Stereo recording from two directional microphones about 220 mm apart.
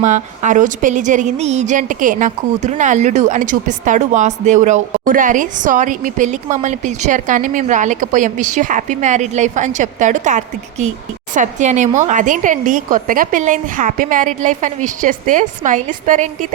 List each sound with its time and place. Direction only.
0.0 s a woman's voice: 35° right (ahead or behind)